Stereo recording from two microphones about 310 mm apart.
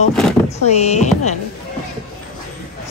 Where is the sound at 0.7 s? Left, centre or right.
Left.